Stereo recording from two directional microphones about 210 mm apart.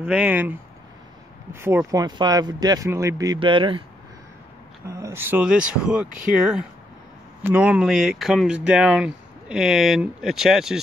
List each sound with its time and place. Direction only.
0.0 s speech: 5° right (ahead or behind); by 3.8 s 25° right (ahead or behind)
4.8 s speech: 15° right (ahead or behind)